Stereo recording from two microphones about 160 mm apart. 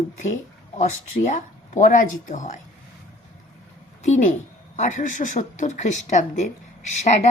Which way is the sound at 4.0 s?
50° left (ahead or behind).